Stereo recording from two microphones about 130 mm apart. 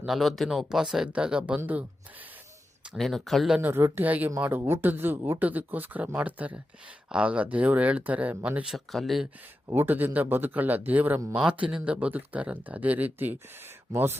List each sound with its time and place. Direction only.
0.0 s speech: centre (ahead or behind)
2.9 s speech: centre (ahead or behind)
3.6 s speech: 15° right (ahead or behind); by 9.2 s centre (ahead or behind)
9.6 s speech: 20° right (ahead or behind)